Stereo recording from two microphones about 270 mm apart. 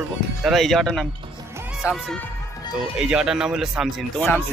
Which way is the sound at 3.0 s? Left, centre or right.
Centre.